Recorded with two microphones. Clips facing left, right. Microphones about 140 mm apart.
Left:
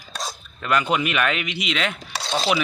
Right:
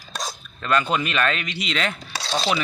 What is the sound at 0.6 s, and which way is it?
Speech, 10° left (ahead or behind).